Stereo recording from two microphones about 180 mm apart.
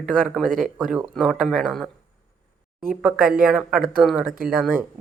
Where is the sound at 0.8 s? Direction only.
5° right (ahead or behind).